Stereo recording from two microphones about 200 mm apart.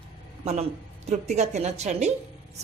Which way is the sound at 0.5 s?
35° right (ahead or behind).